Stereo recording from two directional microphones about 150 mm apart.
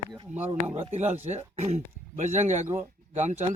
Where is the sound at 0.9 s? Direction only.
50° right (ahead or behind).